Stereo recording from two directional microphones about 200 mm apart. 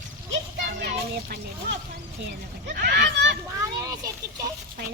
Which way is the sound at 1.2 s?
50° right (ahead or behind).